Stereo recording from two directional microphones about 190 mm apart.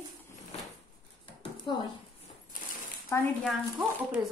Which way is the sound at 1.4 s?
25° left (ahead or behind).